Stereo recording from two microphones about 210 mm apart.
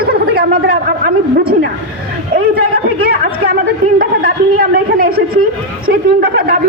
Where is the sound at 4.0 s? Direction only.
45° right (ahead or behind).